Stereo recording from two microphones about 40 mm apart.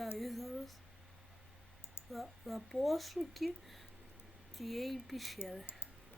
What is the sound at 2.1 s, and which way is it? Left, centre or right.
Speech, centre.